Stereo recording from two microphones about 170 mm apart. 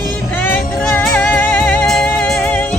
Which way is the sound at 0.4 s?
10° left (ahead or behind).